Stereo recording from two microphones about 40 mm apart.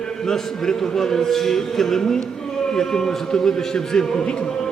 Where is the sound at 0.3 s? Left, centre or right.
Centre.